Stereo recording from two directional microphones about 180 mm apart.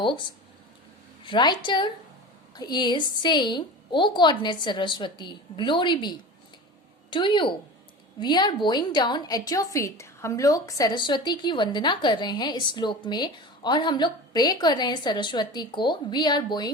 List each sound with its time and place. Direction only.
1.2 s a woman's voice: 25° left (ahead or behind)